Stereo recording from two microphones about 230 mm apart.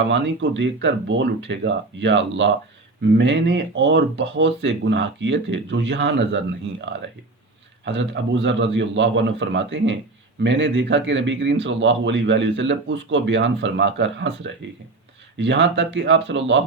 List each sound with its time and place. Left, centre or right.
0.1 s a man's voice: right
7.9 s a man's voice: right